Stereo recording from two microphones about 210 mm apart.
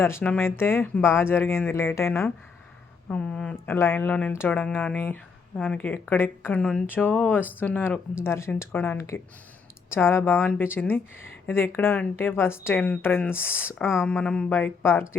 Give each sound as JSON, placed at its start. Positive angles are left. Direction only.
{"t": 0.0, "sound": "speech", "side_deg": 10}
{"t": 13.8, "sound": "speech", "side_deg": 0}